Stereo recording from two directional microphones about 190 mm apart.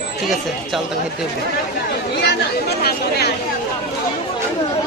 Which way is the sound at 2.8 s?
55° left (ahead or behind).